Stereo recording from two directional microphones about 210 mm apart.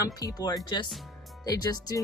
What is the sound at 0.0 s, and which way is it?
A woman's voice, 15° left (ahead or behind).